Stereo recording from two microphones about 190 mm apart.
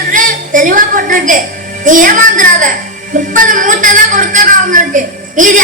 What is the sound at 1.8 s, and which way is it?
A woman's voice, 45° right (ahead or behind).